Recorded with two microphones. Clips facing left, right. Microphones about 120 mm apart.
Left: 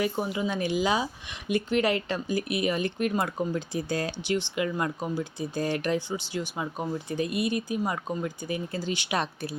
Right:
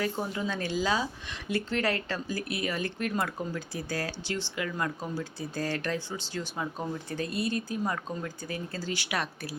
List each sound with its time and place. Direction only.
0.0 s speech: 15° left (ahead or behind)